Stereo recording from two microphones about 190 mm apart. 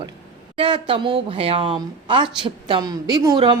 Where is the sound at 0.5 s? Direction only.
25° right (ahead or behind).